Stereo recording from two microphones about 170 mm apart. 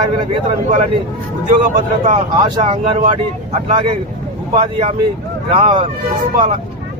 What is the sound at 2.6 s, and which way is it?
Speech, 35° right (ahead or behind).